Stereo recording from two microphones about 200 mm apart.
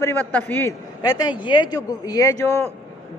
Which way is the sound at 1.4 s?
25° left (ahead or behind).